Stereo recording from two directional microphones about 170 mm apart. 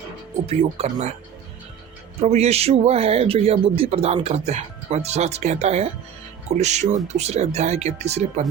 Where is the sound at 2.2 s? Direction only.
40° right (ahead or behind).